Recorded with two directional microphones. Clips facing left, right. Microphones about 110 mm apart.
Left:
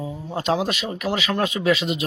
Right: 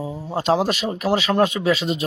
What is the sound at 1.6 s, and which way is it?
Speech, 30° right (ahead or behind).